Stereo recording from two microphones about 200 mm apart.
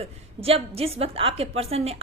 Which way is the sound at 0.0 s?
30° right (ahead or behind).